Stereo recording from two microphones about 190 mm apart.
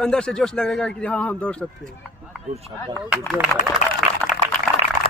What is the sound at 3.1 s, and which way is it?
Speech, 5° right (ahead or behind).